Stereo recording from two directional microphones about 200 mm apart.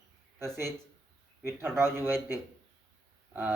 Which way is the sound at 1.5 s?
10° right (ahead or behind).